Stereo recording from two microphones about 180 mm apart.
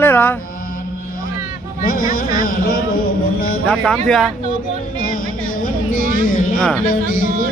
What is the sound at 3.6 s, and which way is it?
Speech, 5° left (ahead or behind).